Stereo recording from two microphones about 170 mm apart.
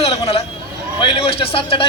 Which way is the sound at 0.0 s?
35° left (ahead or behind).